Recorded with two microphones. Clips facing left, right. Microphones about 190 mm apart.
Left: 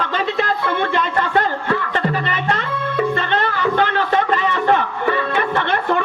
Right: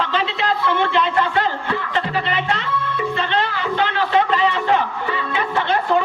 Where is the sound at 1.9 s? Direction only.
50° left (ahead or behind).